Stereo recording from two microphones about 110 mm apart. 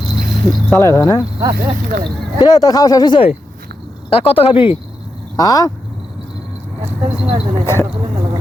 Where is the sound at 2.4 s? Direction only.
35° left (ahead or behind).